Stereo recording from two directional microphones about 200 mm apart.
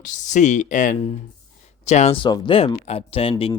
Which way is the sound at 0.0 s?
40° left (ahead or behind).